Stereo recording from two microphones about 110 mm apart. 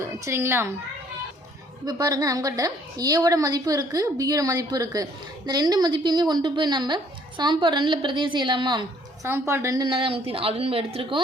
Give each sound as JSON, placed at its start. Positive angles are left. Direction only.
{"t": 0.3, "sound": "a woman's voice", "side_deg": -25}
{"t": 1.8, "sound": "a woman's voice", "side_deg": -35}
{"t": 9.2, "sound": "a woman's voice", "side_deg": -25}
{"t": 9.8, "sound": "speech", "side_deg": -50}